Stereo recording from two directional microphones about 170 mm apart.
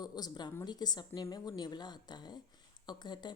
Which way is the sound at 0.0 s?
25° left (ahead or behind).